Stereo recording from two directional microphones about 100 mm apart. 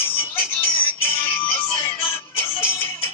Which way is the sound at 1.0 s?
20° left (ahead or behind).